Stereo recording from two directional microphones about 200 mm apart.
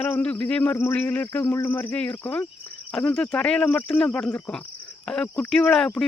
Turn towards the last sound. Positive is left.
turn(degrees=5)  # may be behind; listen again after turning